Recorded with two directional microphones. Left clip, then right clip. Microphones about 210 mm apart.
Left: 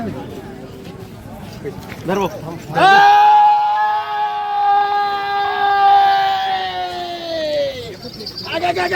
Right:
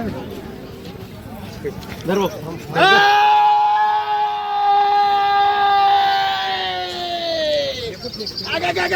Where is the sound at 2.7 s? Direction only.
65° left (ahead or behind); by 7.9 s 50° left (ahead or behind).